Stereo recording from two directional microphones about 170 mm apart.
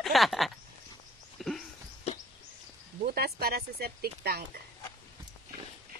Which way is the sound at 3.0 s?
65° right (ahead or behind).